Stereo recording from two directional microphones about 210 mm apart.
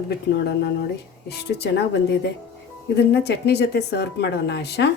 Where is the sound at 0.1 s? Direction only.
55° left (ahead or behind).